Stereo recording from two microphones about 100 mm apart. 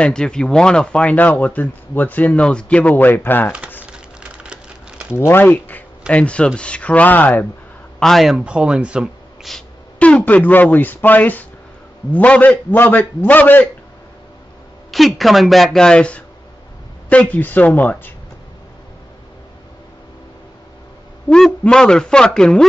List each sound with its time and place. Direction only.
0.0 s speech: 10° left (ahead or behind)
3.8 s a sound: 10° right (ahead or behind)
5.1 s speech: 25° left (ahead or behind)
8.0 s speech: centre (ahead or behind)
9.9 s speech: 15° left (ahead or behind)
14.9 s speech: centre (ahead or behind); by 18.1 s 15° left (ahead or behind)
21.3 s speech: 5° left (ahead or behind)